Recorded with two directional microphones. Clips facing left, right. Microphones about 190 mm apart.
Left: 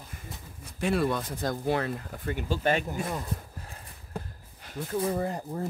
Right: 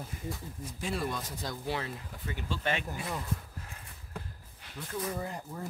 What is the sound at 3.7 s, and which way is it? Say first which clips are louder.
Horse: left 3 dB; 40° left (ahead or behind).